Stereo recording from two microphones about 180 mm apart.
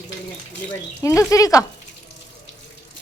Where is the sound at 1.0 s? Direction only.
15° left (ahead or behind).